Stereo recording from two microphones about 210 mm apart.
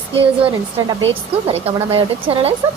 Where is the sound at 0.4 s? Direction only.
20° right (ahead or behind).